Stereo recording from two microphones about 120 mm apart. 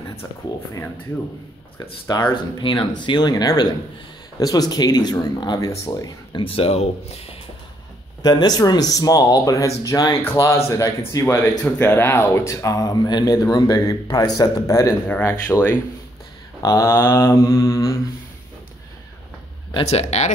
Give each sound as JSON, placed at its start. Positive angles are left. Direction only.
{"t": 2.3, "sound": "speech", "side_deg": 40}
{"t": 6.3, "sound": "speech", "side_deg": 50}
{"t": 8.2, "sound": "speech", "side_deg": 35}
{"t": 10.7, "sound": "mantra", "side_deg": 25}
{"t": 11.6, "sound": "speech", "side_deg": 15}
{"t": 15.0, "sound": "speech", "side_deg": 15}
{"t": 16.6, "sound": "mantra", "side_deg": 25}
{"t": 19.8, "sound": "speech", "side_deg": 65}